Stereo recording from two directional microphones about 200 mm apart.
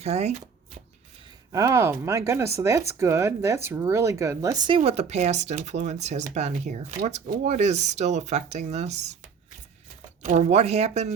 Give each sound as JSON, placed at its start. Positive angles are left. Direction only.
{"t": 0.0, "sound": "shuffling cards", "side_deg": -35}
{"t": 1.5, "sound": "speech", "side_deg": -15}
{"t": 10.2, "sound": "speech", "side_deg": -35}